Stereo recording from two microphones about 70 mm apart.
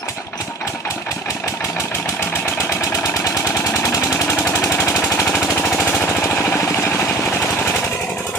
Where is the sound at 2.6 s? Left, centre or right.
Left.